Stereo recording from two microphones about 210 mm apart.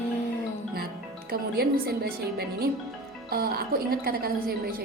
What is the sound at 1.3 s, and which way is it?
A woman's voice, 50° right (ahead or behind).